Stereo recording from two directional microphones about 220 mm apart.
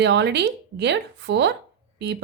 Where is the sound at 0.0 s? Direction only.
50° right (ahead or behind).